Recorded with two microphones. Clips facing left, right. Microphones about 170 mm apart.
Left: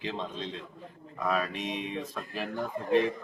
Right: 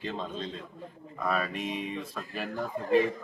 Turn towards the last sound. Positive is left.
turn(degrees=0)  # may be behind; listen again after turning